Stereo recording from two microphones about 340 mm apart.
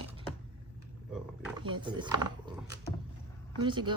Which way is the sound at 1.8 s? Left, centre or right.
Centre.